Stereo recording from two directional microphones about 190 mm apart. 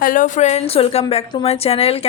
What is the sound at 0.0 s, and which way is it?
A woman's voice, 45° left (ahead or behind).